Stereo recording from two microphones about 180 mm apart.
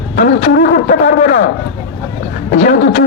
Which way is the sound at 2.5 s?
40° left (ahead or behind).